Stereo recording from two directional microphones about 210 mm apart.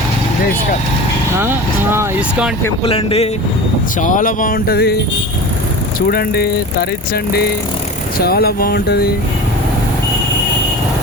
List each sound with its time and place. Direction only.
1.4 s speech: 10° right (ahead or behind)
2.8 s speech: 30° left (ahead or behind)
4.0 s speech: 40° left (ahead or behind)
6.1 s speech: 50° left (ahead or behind)